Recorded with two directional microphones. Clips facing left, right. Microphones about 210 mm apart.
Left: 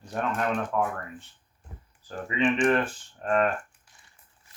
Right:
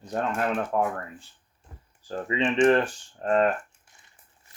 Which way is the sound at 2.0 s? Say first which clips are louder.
Even; 30° right (ahead or behind).